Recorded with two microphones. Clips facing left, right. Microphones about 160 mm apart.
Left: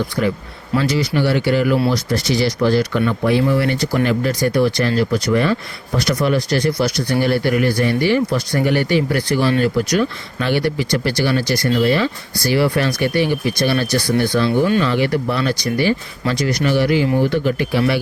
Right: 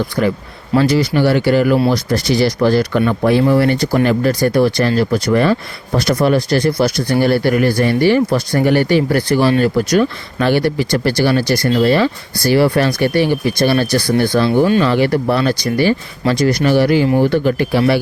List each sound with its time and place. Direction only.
0.8 s speech: 45° right (ahead or behind)
7.1 s speech: 40° right (ahead or behind)
16.3 s speech: 55° right (ahead or behind)
16.6 s speech: 40° right (ahead or behind)